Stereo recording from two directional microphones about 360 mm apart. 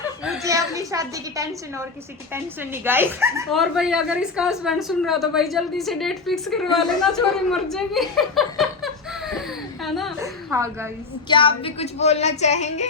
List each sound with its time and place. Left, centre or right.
0.3 s a woman's voice: centre
11.3 s speech: centre